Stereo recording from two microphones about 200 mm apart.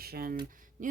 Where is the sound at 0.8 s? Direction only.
40° right (ahead or behind).